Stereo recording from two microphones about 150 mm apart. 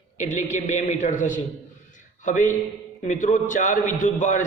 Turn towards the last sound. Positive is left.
turn(degrees=55)  # may be behind; listen again after turning